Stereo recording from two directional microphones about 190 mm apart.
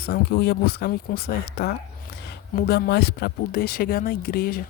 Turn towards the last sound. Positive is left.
turn(degrees=50)  # may be behind; listen again after turning